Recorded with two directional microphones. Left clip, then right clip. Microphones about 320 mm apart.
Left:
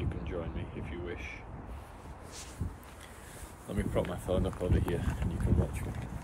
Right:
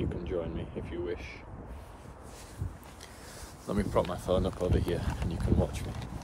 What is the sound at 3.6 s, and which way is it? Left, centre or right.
Speech, centre.